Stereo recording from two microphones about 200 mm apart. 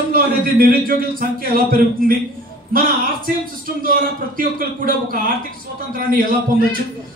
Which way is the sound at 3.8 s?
45° right (ahead or behind).